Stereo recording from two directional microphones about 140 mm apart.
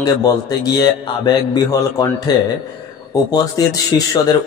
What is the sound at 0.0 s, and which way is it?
A man's voice, 25° left (ahead or behind).